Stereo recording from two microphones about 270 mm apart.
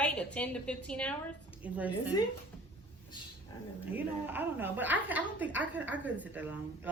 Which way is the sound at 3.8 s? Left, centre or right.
Centre.